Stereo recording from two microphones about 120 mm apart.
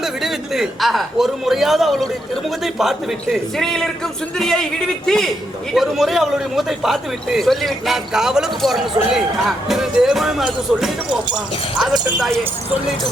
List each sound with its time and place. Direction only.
0.0 s a man's voice: centre (ahead or behind)